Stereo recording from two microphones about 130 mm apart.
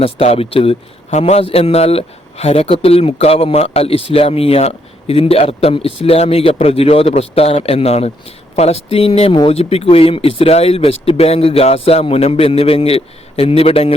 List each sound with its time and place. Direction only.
0.0 s a man's voice: 50° left (ahead or behind)